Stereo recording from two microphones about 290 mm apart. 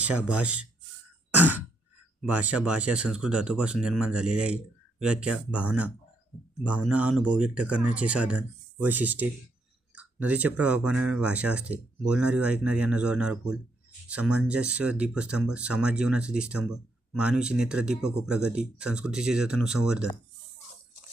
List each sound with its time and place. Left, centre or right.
0.4 s speech: right
2.3 s speech: centre